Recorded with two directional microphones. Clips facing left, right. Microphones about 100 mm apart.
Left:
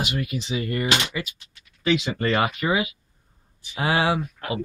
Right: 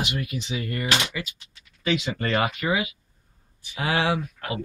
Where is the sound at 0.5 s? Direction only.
35° left (ahead or behind).